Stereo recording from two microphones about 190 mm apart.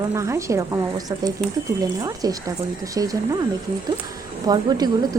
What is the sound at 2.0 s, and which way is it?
Speech, 20° right (ahead or behind).